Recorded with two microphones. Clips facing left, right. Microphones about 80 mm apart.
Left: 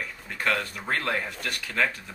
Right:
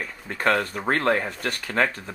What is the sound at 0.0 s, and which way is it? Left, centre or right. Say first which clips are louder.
Speech: right 5 dB; right.